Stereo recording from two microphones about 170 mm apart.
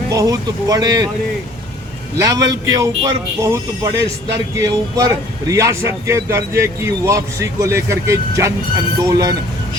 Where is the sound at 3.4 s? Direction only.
20° right (ahead or behind).